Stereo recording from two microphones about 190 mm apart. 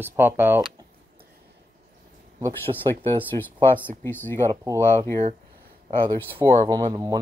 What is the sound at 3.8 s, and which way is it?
Speech, 10° left (ahead or behind).